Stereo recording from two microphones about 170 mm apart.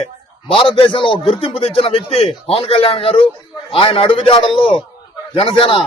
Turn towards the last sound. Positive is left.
turn(degrees=30)  # may be behind; listen again after turning